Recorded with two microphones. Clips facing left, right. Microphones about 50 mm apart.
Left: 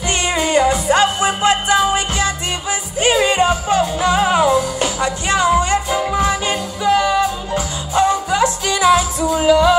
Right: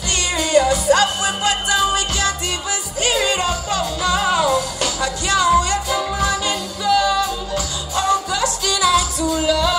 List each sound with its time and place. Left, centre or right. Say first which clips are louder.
0.3 s music: left 1 dB; left